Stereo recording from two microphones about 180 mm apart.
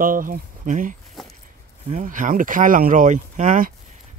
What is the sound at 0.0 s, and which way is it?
Speech, 50° right (ahead or behind).